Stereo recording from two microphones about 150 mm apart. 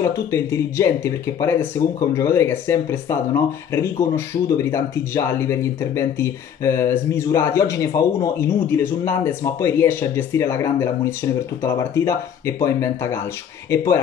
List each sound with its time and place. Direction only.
0.0 s speech: 20° left (ahead or behind)